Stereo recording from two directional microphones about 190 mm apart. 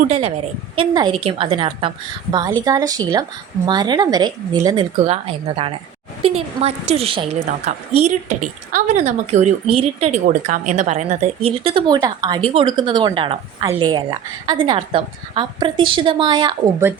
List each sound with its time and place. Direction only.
0.0 s a woman's voice: 35° right (ahead or behind)
5.0 s a woman's voice: 30° right (ahead or behind)